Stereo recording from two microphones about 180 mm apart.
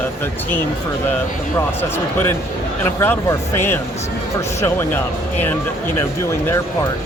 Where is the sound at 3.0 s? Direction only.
15° left (ahead or behind).